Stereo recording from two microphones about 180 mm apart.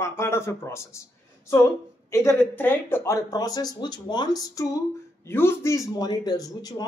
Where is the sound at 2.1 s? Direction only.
15° left (ahead or behind).